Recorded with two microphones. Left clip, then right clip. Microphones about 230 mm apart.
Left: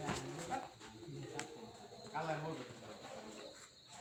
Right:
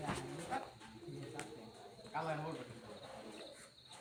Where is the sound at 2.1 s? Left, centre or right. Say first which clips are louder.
Right 1 dB; right.